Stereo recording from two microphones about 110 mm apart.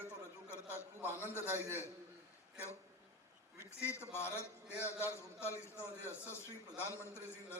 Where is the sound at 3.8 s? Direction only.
20° left (ahead or behind).